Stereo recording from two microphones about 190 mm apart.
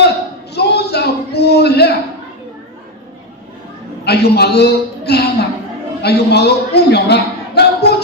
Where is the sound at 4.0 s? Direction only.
60° left (ahead or behind).